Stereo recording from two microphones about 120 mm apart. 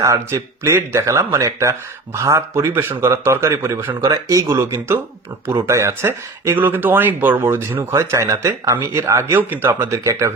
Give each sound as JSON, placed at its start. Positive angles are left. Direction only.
{"t": 0.0, "sound": "speech", "side_deg": -25}